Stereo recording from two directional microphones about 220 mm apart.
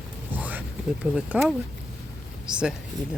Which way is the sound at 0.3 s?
5° right (ahead or behind).